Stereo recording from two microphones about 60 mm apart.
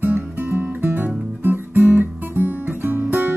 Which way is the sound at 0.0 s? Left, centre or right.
Right.